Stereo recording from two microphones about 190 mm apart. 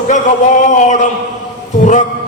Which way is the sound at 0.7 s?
40° left (ahead or behind).